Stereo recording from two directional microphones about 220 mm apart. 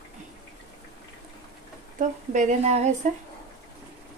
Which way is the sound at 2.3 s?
35° right (ahead or behind).